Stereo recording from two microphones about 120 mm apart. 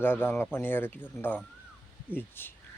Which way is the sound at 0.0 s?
20° left (ahead or behind).